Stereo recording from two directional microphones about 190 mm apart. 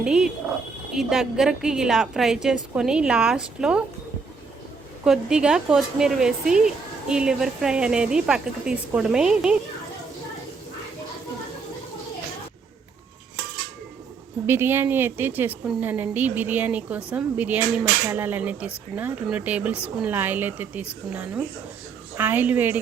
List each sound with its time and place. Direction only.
0.0 s speech: 5° right (ahead or behind)
5.0 s speech: 5° right (ahead or behind)
14.4 s speech: 10° right (ahead or behind)